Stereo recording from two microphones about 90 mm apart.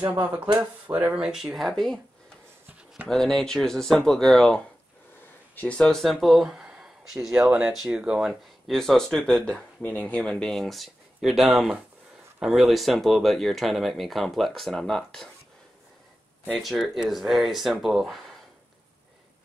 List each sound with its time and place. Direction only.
0.1 s speech: 20° right (ahead or behind); by 2.0 s 5° left (ahead or behind)
3.1 s speech: 5° left (ahead or behind)
5.6 s speech: 10° left (ahead or behind); by 7.7 s 15° right (ahead or behind)
7.7 s speech: 5° right (ahead or behind)
8.3 s speech: centre (ahead or behind)
10.6 s speech: centre (ahead or behind)
16.4 s speech: centre (ahead or behind)